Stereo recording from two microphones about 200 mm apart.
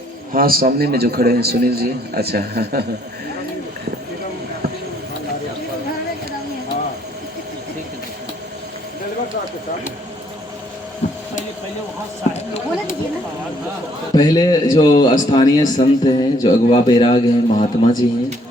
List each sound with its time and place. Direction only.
0.3 s a man's voice: 45° right (ahead or behind)
11.0 s a sound: 35° left (ahead or behind)
12.3 s speech: 35° left (ahead or behind)
14.2 s speech: 20° left (ahead or behind)